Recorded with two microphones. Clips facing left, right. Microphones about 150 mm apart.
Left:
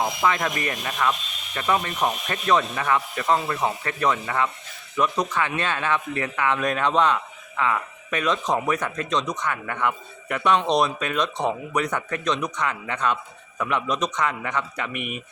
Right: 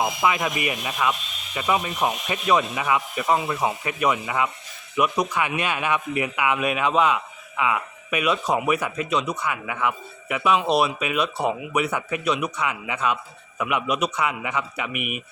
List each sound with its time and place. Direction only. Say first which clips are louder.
0.0 s speech: even; 10° right (ahead or behind)